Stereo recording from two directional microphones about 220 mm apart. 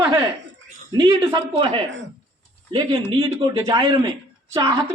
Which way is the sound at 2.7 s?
15° right (ahead or behind).